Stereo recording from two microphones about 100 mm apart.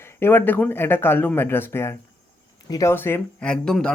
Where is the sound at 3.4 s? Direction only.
10° left (ahead or behind).